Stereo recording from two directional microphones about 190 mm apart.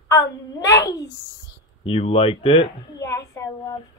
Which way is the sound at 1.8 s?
30° left (ahead or behind).